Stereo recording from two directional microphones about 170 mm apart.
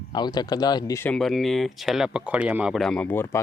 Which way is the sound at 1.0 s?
Centre (ahead or behind).